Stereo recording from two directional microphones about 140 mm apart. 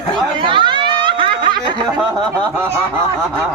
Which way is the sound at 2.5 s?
15° right (ahead or behind).